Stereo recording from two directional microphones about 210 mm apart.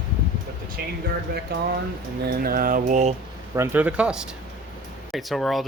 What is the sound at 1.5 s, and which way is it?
Mantra, 50° right (ahead or behind).